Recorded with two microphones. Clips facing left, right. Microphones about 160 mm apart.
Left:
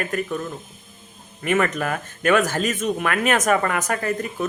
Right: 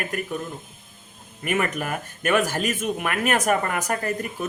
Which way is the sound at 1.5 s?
10° right (ahead or behind).